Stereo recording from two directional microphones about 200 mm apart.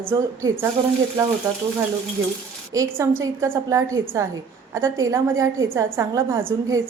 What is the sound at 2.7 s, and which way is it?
A woman's voice, 15° right (ahead or behind).